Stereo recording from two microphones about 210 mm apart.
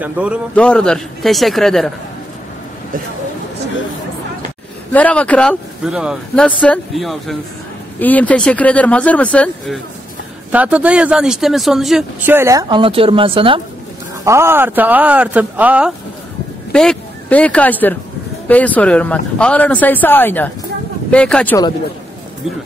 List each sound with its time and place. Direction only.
0.0 s speech: 5° right (ahead or behind)
0.6 s speech: 5° left (ahead or behind)
4.9 s speech: 5° left (ahead or behind)
5.9 s speech: 5° right (ahead or behind)
6.4 s speech: 5° left (ahead or behind)
10.5 s speech: 5° right (ahead or behind); by 13.6 s 25° right (ahead or behind)
14.2 s speech: 10° right (ahead or behind)
16.7 s speech: 5° left (ahead or behind)